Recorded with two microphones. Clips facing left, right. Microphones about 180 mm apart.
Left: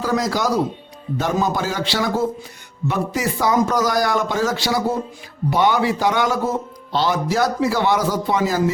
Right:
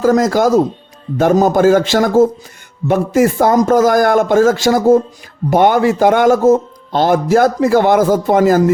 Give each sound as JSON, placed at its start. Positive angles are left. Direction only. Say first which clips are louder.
{"t": 0.0, "sound": "a man's voice", "louder": "right 9 dB", "side_deg": -45}